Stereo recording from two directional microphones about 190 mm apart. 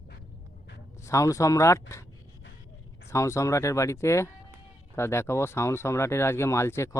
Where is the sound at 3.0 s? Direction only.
15° left (ahead or behind).